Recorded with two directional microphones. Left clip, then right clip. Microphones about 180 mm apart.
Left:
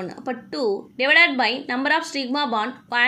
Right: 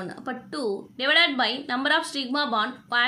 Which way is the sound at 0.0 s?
10° left (ahead or behind).